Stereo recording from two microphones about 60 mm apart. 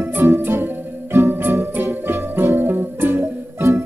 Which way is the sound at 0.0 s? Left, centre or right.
Right.